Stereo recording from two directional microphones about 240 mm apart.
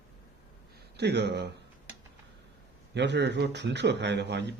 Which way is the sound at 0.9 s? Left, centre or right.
Right.